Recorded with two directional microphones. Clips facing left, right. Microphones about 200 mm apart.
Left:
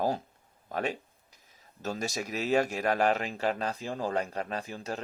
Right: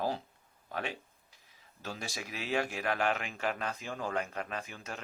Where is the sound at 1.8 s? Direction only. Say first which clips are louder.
Left 8 dB; 45° left (ahead or behind).